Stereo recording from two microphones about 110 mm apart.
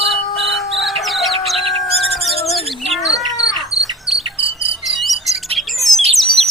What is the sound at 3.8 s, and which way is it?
Insect, centre (ahead or behind).